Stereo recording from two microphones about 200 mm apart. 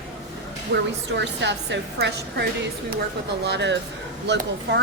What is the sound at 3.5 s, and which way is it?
A woman's voice, 60° right (ahead or behind).